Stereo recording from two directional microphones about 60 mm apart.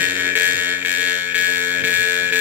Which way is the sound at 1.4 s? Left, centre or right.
Right.